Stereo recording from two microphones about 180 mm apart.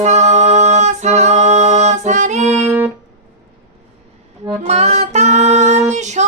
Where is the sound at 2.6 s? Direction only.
10° right (ahead or behind).